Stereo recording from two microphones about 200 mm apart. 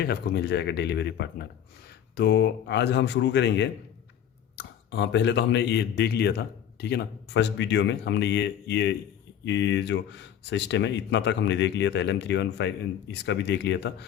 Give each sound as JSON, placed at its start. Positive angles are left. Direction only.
{"t": 0.0, "sound": "speech", "side_deg": 55}